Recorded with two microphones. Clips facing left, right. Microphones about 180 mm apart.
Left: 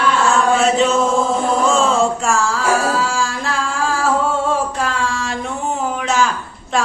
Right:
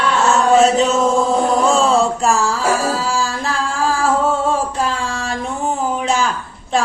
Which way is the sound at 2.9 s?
35° right (ahead or behind).